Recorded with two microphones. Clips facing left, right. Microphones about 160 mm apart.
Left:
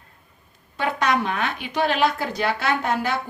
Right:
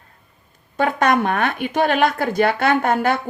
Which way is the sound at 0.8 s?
50° right (ahead or behind).